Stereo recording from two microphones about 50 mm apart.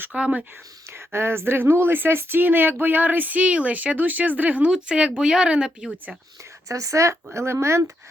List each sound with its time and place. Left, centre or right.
0.1 s speech: right
0.9 s speech: right
4.7 s speech: right
6.7 s speech: right
7.3 s speech: right